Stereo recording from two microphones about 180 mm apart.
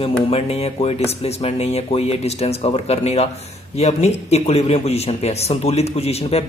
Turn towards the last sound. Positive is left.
turn(degrees=35)  # may be behind; listen again after turning